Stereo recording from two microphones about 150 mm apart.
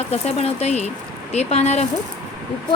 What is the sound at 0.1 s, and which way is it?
Speech, 40° left (ahead or behind).